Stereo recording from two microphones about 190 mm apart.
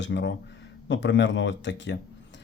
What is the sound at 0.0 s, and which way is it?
Speech, 70° left (ahead or behind).